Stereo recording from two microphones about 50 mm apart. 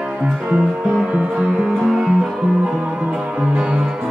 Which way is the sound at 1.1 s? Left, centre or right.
Centre.